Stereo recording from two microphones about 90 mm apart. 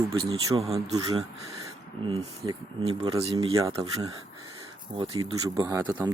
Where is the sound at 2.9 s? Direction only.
90° right.